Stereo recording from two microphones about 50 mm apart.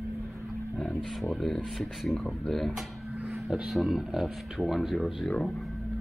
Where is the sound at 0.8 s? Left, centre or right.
Centre.